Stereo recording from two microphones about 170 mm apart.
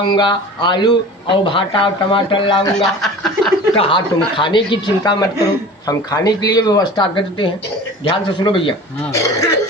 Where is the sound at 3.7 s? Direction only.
30° left (ahead or behind).